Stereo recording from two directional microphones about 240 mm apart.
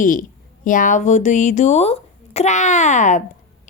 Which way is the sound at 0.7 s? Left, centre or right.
Left.